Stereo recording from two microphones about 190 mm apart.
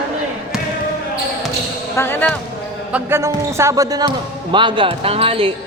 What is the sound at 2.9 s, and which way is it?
Speech, 15° right (ahead or behind).